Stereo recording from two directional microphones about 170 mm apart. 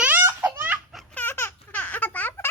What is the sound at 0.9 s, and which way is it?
Baby laughter, 5° left (ahead or behind).